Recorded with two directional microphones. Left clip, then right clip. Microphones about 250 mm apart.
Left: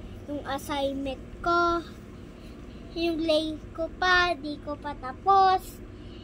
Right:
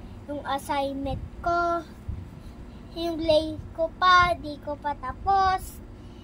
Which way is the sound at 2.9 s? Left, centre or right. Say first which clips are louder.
Right 2 dB; centre.